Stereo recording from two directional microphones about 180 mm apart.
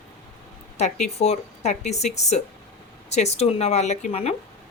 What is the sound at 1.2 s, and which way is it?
A woman's voice, 35° left (ahead or behind).